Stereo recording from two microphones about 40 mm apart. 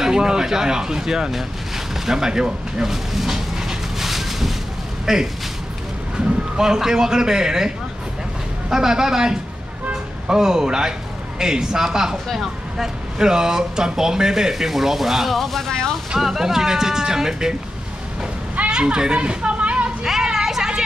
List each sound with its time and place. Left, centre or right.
0.0 s speech: centre
2.0 s a sound: centre
5.0 s a man's voice: centre
16.2 s speech: centre
18.7 s children playing: right
20.1 s a sound: centre